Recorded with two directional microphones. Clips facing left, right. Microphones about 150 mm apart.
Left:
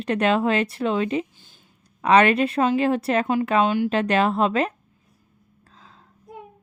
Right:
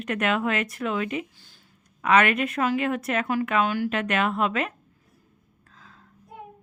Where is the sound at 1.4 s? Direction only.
20° left (ahead or behind).